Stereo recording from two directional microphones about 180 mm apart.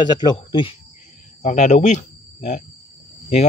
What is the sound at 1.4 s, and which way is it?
Speech, 40° left (ahead or behind).